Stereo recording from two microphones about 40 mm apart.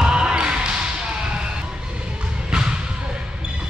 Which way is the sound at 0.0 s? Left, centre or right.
Right.